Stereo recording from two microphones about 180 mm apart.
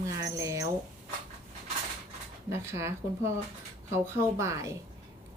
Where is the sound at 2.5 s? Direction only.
15° right (ahead or behind).